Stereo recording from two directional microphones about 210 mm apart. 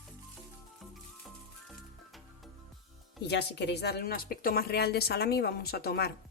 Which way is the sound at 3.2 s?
55° left (ahead or behind).